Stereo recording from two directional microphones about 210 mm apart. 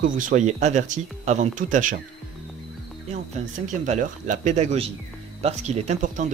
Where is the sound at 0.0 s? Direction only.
40° right (ahead or behind).